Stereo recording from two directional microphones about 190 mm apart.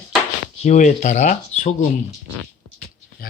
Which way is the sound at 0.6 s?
40° left (ahead or behind).